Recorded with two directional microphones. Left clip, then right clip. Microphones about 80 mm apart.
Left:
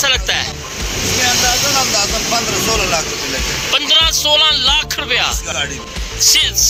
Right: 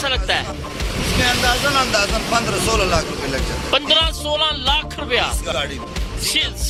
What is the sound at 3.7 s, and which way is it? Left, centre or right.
Speech, right.